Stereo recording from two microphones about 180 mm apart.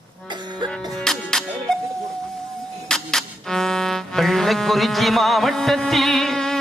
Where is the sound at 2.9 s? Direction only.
Centre (ahead or behind).